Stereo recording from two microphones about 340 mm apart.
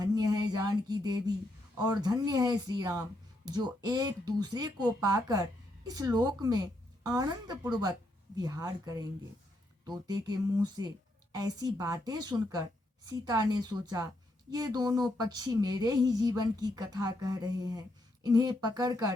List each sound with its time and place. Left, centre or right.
0.0 s a sound: centre
1.8 s speech: centre
10.1 s speech: centre